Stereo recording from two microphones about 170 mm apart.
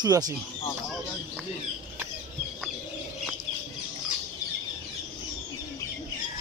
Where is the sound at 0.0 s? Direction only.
20° right (ahead or behind).